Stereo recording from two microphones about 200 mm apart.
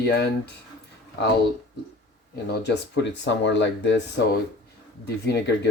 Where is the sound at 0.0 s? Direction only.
55° left (ahead or behind).